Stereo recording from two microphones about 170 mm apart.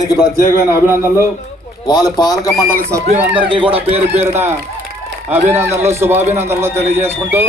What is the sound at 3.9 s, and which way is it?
A man's voice, 10° right (ahead or behind).